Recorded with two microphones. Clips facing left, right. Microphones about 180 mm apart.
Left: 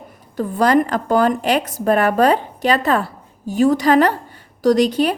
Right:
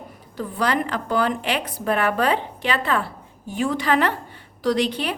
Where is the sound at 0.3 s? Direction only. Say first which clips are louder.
Left 8 dB; 45° left (ahead or behind).